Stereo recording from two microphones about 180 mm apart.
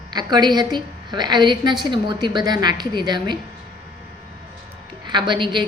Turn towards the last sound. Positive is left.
turn(degrees=-25)  # may be behind; listen again after turning